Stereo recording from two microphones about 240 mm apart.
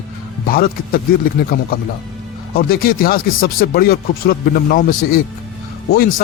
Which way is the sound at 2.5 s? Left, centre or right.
Left.